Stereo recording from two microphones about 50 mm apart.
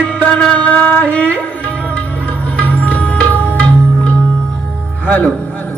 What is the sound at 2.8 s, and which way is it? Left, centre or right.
Music, left.